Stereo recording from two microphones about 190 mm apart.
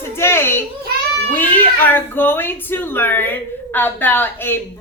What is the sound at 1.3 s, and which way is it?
Cat, 10° left (ahead or behind).